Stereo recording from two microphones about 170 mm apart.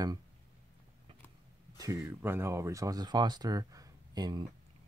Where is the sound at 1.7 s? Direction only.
20° right (ahead or behind).